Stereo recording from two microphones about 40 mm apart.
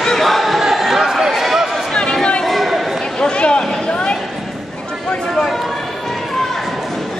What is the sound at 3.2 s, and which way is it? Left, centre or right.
Speech, left.